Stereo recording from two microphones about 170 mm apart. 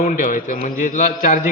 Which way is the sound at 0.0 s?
50° left (ahead or behind).